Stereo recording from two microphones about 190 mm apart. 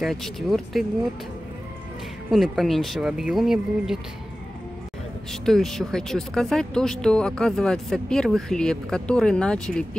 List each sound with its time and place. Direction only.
0.0 s speech: centre (ahead or behind)
2.3 s speech: centre (ahead or behind)
5.3 s speech: centre (ahead or behind)